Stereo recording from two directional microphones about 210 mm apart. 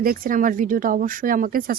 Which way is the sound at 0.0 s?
45° right (ahead or behind).